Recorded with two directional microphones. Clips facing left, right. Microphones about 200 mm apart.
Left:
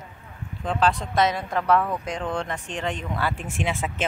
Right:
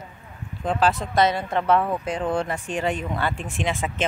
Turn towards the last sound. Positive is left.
turn(degrees=5)  # may be behind; listen again after turning